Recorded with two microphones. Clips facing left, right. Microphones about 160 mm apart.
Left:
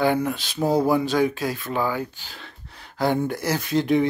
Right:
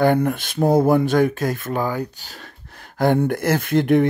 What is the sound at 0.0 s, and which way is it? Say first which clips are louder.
Speech: right 4 dB; 55° right (ahead or behind).